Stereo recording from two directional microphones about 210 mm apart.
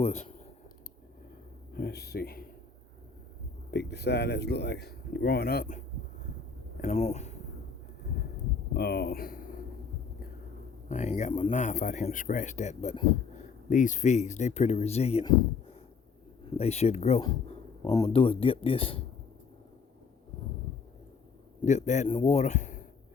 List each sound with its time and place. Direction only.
0.0 s speech: 30° left (ahead or behind)
1.7 s speech: 50° left (ahead or behind)
3.7 s speech: 50° left (ahead or behind)
6.8 s speech: 35° left (ahead or behind)
8.7 s speech: 50° left (ahead or behind)
10.8 s speech: 35° left (ahead or behind)
16.6 s speech: 30° left (ahead or behind)
21.6 s speech: 35° left (ahead or behind)